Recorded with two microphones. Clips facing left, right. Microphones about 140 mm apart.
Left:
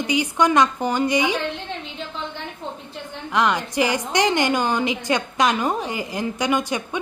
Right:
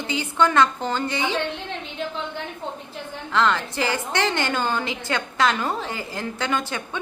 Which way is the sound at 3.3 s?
15° left (ahead or behind).